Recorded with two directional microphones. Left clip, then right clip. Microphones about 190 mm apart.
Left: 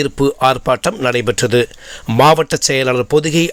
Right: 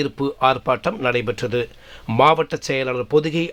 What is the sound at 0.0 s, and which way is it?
Speech, 25° left (ahead or behind).